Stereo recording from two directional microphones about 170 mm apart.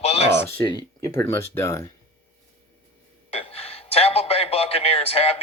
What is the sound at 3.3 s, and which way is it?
A man's voice, 35° left (ahead or behind).